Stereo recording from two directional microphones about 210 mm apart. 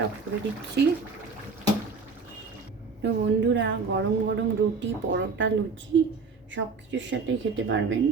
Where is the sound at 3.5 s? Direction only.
60° right (ahead or behind).